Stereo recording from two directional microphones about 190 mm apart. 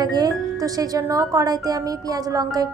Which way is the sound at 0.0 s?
20° right (ahead or behind).